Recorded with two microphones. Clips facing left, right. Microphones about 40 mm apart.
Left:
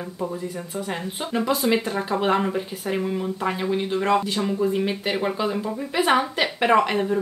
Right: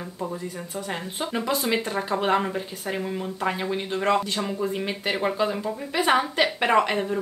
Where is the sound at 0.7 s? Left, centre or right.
Centre.